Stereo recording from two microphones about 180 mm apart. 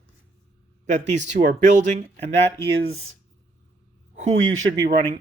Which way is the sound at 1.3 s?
45° right (ahead or behind).